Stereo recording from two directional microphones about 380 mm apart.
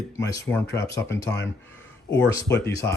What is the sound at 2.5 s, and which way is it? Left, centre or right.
Speech, left.